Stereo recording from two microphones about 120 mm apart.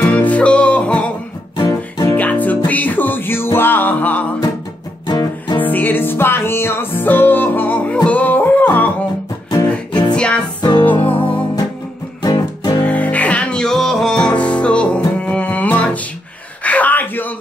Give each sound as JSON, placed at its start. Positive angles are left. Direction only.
{"t": 0.0, "sound": "music", "side_deg": 10}
{"t": 1.6, "sound": "music", "side_deg": 25}
{"t": 2.1, "sound": "music", "side_deg": 15}
{"t": 5.0, "sound": "music", "side_deg": 35}
{"t": 5.6, "sound": "music", "side_deg": 15}
{"t": 9.5, "sound": "music", "side_deg": 35}
{"t": 10.1, "sound": "music", "side_deg": 10}
{"t": 10.6, "sound": "music", "side_deg": 40}
{"t": 12.8, "sound": "music", "side_deg": 10}
{"t": 16.6, "sound": "gasp", "side_deg": 15}